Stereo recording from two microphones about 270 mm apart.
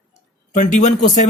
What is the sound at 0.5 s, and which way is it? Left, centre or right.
Speech, left.